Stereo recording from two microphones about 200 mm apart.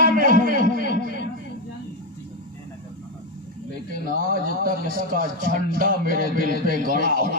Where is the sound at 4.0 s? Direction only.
45° right (ahead or behind).